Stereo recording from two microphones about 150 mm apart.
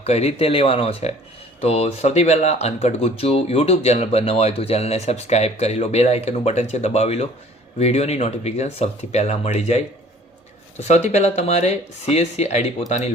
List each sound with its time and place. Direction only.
0.0 s speech: 45° left (ahead or behind)